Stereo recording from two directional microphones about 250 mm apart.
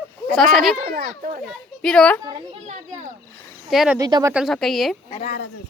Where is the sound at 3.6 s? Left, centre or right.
Centre.